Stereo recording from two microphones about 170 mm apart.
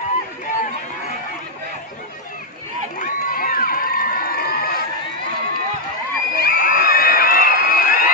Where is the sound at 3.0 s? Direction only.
50° left (ahead or behind).